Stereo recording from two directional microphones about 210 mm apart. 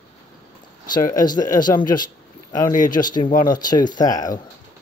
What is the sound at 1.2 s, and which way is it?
Speech, 20° left (ahead or behind).